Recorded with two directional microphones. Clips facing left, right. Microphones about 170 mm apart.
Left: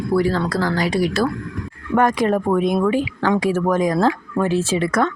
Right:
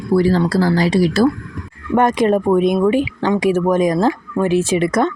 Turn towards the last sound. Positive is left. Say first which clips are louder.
# right 3 dB
turn(degrees=-20)  # may be behind; listen again after turning